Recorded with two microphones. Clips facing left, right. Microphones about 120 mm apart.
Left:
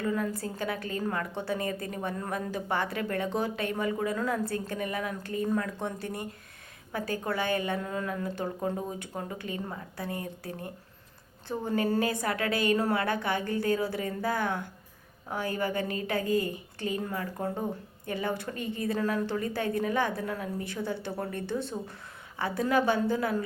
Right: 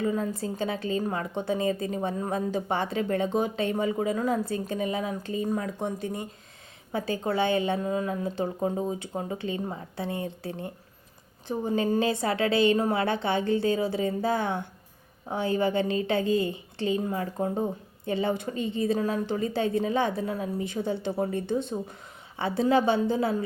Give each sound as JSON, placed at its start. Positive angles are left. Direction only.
{"t": 0.0, "sound": "a woman's voice", "side_deg": -20}